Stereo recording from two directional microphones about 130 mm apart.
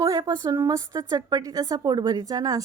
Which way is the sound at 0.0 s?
25° right (ahead or behind).